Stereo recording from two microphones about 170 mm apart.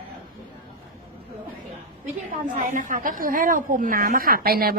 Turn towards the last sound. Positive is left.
turn(degrees=-60)  # may be behind; listen again after turning